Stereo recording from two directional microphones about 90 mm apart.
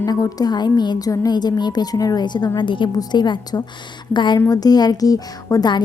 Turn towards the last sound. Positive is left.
turn(degrees=40)  # may be behind; listen again after turning